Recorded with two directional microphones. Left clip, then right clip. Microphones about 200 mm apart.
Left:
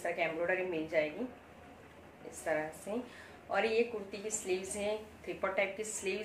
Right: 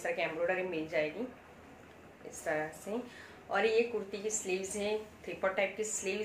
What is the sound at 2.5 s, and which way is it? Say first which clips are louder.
A woman's voice: even; 10° right (ahead or behind).